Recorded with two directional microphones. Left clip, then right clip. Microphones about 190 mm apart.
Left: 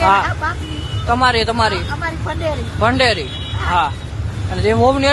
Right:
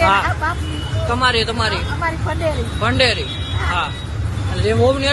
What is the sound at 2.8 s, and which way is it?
Speech, 30° left (ahead or behind).